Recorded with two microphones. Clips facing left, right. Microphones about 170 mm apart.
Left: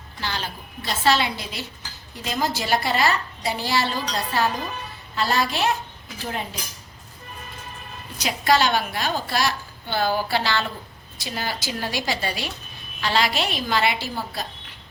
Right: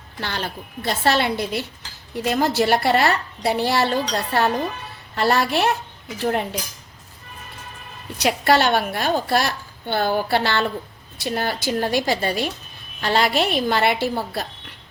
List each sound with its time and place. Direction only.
0.2 s a woman's voice: 60° right (ahead or behind)
8.2 s a woman's voice: 60° right (ahead or behind)